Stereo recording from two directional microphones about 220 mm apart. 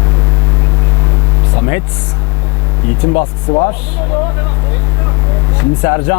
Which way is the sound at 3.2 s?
30° left (ahead or behind).